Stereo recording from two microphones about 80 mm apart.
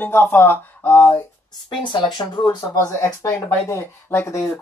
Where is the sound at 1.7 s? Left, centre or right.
Left.